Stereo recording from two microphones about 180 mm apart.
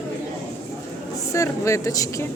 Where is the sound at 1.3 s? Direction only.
15° left (ahead or behind).